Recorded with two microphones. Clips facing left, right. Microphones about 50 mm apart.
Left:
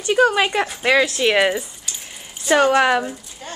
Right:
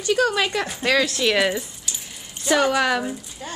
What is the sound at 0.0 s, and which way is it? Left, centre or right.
Speech, left.